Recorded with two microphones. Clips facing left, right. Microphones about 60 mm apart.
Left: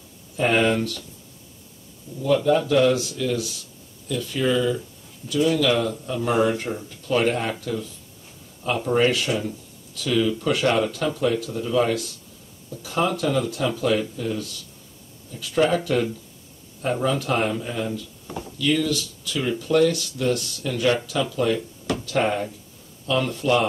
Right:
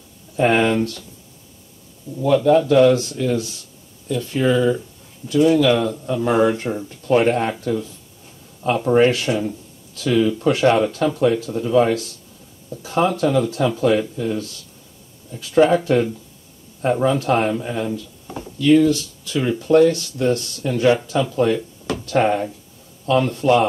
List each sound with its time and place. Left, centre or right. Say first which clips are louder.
0.4 s speech: right 4 dB; right
2.2 s speech: right 5 dB; right
4.5 s speech: right 4 dB; centre
5.3 s speech: right 5 dB; right
15.7 s speech: right 5 dB; right
17.5 s speech: right 4 dB; right